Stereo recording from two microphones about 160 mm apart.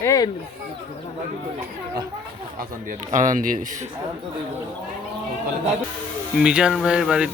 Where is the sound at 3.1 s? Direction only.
50° right (ahead or behind).